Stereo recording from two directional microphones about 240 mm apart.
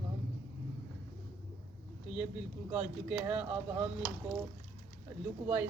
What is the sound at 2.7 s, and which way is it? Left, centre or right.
Speech, centre.